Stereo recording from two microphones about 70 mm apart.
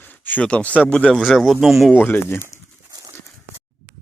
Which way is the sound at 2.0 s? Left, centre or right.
Left.